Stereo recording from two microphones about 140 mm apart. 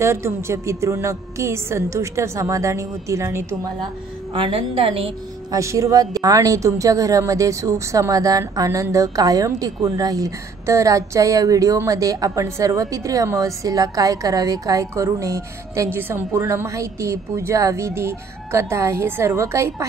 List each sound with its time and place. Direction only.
0.0 s a woman's voice: 20° right (ahead or behind)
4.3 s a woman's voice: 40° right (ahead or behind)
5.5 s a woman's voice: 20° right (ahead or behind)